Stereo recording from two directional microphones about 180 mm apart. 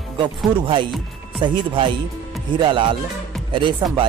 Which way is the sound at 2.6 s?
25° right (ahead or behind).